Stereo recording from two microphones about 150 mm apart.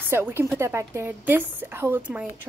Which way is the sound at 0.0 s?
15° right (ahead or behind).